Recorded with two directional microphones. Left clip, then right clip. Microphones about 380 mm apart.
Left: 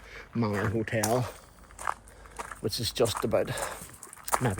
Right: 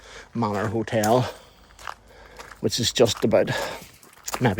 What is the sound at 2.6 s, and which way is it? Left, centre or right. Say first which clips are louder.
Speech: right 8 dB; right.